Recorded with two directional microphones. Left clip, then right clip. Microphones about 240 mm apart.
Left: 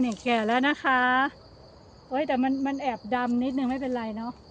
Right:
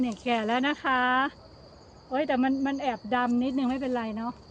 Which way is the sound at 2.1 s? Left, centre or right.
Centre.